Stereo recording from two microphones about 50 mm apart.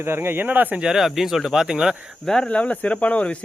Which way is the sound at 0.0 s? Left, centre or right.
Right.